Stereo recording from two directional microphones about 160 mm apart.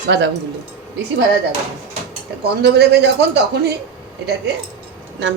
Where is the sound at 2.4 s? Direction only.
90° right.